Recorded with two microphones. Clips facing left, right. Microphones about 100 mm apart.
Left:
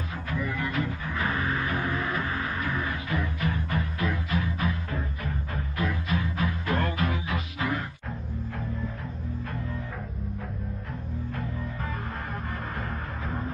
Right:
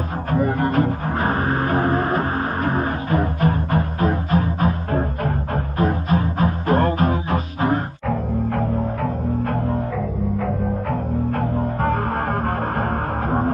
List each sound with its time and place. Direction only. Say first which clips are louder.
0.3 s music: right 11 dB; 45° right (ahead or behind)
8.1 s music: right 18 dB; 80° right
11.3 s music: right 12 dB; 60° right (ahead or behind)